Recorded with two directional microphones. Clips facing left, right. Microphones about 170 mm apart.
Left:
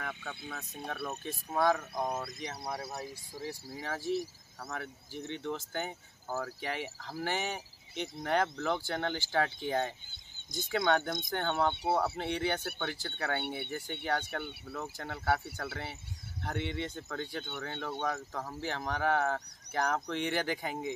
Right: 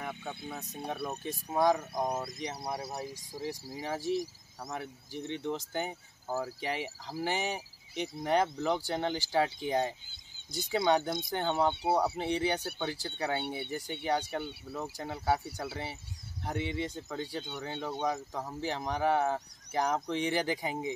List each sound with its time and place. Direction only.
0.0 s a sound: 15° right (ahead or behind)
0.5 s speech: 15° right (ahead or behind)
16.8 s speech: 15° right (ahead or behind)